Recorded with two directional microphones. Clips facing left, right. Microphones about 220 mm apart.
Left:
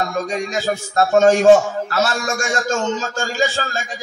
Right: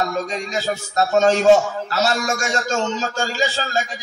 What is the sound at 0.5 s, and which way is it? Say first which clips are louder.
A man's voice: left 2 dB; 50° left (ahead or behind).